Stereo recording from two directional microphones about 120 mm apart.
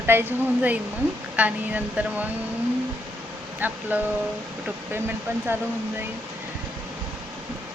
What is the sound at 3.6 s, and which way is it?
Speech, 15° right (ahead or behind).